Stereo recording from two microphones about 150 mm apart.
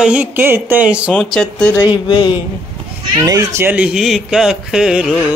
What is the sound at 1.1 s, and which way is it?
Speech, 5° left (ahead or behind).